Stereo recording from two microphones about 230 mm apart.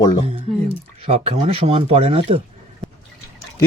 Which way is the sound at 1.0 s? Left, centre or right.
Right.